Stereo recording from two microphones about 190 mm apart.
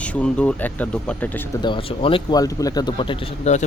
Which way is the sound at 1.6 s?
25° left (ahead or behind).